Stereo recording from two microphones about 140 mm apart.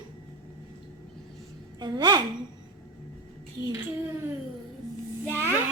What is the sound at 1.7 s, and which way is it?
Speech, 30° right (ahead or behind).